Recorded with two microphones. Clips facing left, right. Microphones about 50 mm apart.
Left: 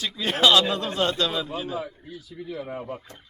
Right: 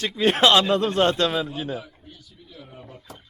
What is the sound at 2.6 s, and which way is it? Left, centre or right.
Speech, left.